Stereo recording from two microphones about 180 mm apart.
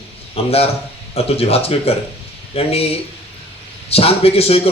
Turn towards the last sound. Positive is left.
turn(degrees=35)  # may be behind; listen again after turning